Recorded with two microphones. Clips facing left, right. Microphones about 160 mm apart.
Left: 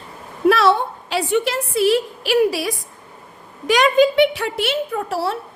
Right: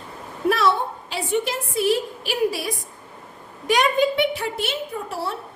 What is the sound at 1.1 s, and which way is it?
A woman's voice, 80° left.